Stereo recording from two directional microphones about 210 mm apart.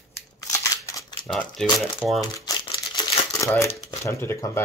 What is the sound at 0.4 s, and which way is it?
Scissors, 15° left (ahead or behind).